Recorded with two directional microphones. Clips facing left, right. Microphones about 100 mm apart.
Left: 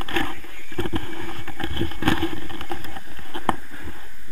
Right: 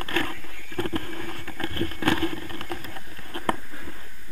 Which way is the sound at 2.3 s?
35° left (ahead or behind).